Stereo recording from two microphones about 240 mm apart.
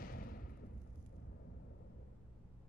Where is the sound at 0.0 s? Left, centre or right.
Left.